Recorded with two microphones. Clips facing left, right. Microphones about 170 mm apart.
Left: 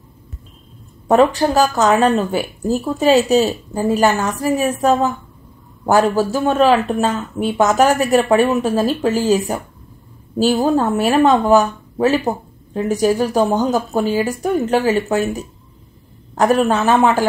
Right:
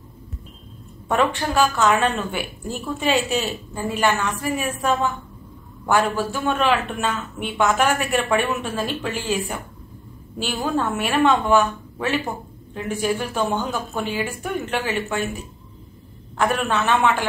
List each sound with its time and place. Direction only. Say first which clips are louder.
1.0 s speech: left 8 dB; 40° left (ahead or behind)
16.3 s speech: left 7 dB; 40° left (ahead or behind)